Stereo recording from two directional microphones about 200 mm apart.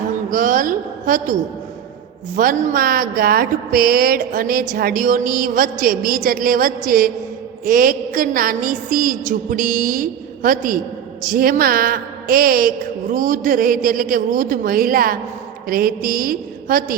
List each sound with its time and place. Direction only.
0.1 s a woman's voice: 40° right (ahead or behind)